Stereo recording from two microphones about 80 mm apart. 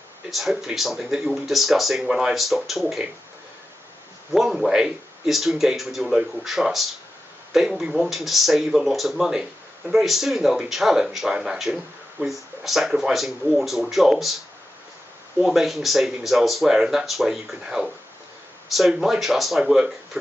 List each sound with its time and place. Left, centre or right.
0.3 s speech: centre
4.3 s speech: centre
15.4 s speech: centre